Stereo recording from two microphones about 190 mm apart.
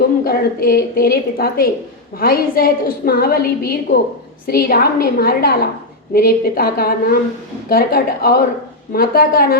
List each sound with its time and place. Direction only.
0.3 s a woman's voice: 50° left (ahead or behind)